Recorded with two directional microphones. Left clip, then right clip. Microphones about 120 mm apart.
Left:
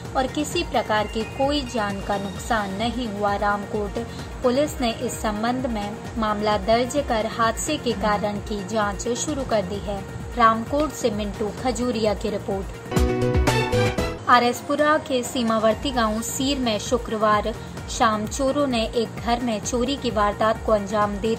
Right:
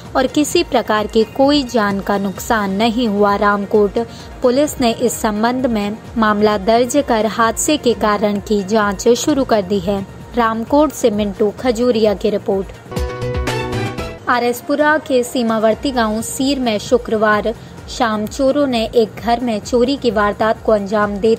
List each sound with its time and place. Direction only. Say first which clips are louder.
0.1 s a woman's voice: right 9 dB; 90° right; by 12.4 s 40° right (ahead or behind)
13.5 s music: right 1 dB; centre (ahead or behind)
14.2 s a woman's voice: right 2 dB; 50° right (ahead or behind)